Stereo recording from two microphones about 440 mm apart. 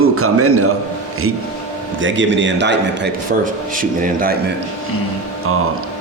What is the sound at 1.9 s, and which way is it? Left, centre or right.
A man's voice, right.